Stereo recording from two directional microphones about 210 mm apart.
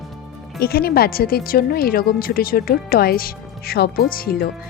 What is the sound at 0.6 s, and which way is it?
Speech, 45° left (ahead or behind).